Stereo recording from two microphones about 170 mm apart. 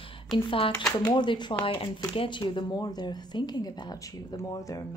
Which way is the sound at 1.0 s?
25° left (ahead or behind).